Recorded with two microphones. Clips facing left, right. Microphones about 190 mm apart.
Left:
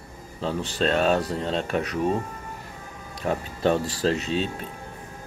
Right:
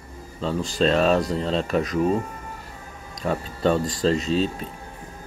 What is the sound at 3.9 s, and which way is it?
Speech, 65° left (ahead or behind).